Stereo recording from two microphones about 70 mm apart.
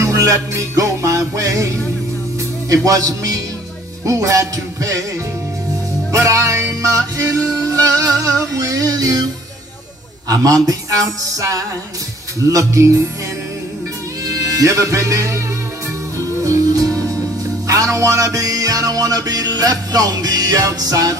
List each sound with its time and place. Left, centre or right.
0.0 s music: right
6.1 s music: right
10.2 s music: right
14.2 s music: right
16.4 s music: right
16.8 s music: centre
17.6 s music: right